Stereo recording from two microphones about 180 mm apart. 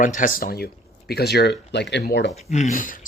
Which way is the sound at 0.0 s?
45° left (ahead or behind).